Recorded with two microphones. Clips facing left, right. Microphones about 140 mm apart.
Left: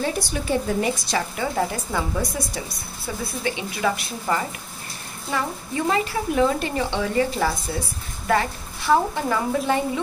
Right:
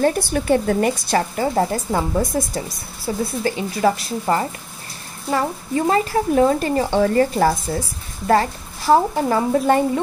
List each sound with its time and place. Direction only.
0.0 s a woman's voice: 55° right (ahead or behind); by 9.8 s 35° right (ahead or behind)